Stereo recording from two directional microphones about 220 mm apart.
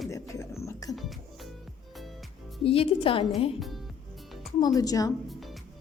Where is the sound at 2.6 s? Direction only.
25° left (ahead or behind).